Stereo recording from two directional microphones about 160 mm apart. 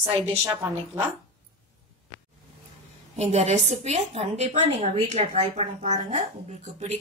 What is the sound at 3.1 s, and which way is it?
A woman's voice, 40° right (ahead or behind).